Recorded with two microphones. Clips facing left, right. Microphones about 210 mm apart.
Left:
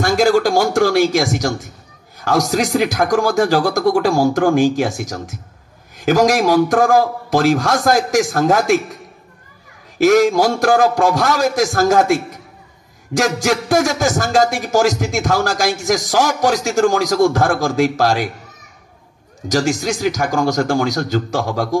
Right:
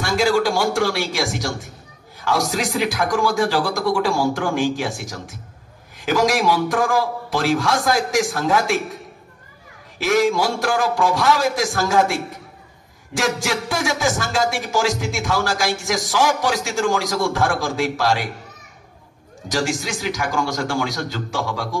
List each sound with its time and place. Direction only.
0.0 s a man's voice: 45° left (ahead or behind)
9.9 s a man's voice: 45° left (ahead or behind)
19.5 s a man's voice: 40° left (ahead or behind)